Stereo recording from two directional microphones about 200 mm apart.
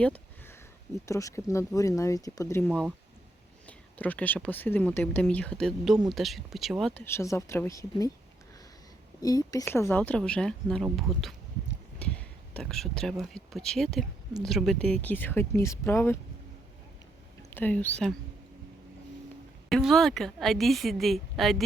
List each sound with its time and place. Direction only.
0.0 s a sound: 10° left (ahead or behind)
1.0 s speech: 15° left (ahead or behind)
2.6 s a woman's voice: centre (ahead or behind); by 8.1 s 15° left (ahead or behind)
9.2 s speech: 20° left (ahead or behind)
12.5 s a woman's voice: centre (ahead or behind)
17.5 s speech: 10° left (ahead or behind)
19.7 s a woman's voice: centre (ahead or behind)